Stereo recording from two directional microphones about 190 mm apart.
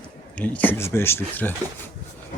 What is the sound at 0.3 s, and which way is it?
Speech, 10° left (ahead or behind).